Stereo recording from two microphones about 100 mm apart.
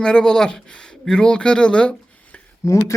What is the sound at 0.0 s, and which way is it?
Speech, 10° left (ahead or behind).